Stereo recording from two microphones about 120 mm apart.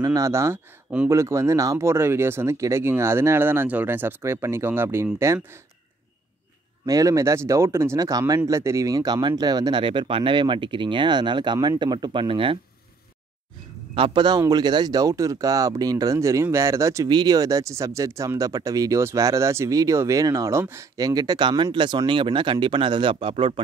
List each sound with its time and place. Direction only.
0.0 s speech: 25° right (ahead or behind)
6.9 s a man's voice: 30° right (ahead or behind); by 12.5 s 45° right (ahead or behind)
13.9 s a man's voice: 45° right (ahead or behind)